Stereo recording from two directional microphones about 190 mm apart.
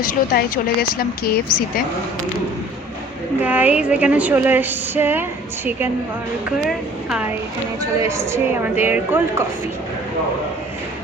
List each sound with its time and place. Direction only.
0.0 s a woman's voice: 50° left (ahead or behind)
3.4 s speech: 10° right (ahead or behind)
6.7 s a woman's voice: centre (ahead or behind)
8.0 s speech: 15° right (ahead or behind)